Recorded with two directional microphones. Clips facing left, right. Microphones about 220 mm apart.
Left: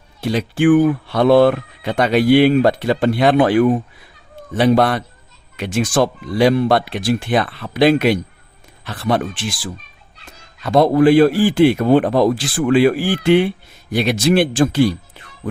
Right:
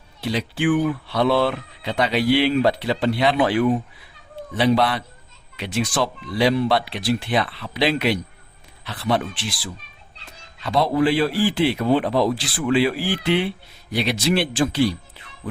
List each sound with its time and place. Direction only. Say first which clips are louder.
0.2 s speech: left 6 dB; 50° left (ahead or behind)